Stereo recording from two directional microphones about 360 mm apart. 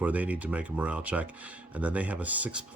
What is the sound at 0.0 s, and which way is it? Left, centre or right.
Speech, centre.